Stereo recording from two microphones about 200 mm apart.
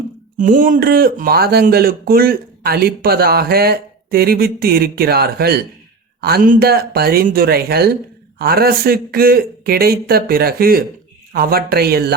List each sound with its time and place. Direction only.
0.3 s speech: 40° right (ahead or behind)